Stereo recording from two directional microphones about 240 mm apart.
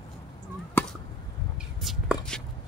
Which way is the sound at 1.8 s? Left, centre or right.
Centre.